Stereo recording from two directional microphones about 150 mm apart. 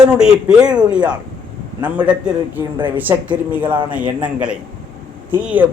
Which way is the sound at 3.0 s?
10° right (ahead or behind).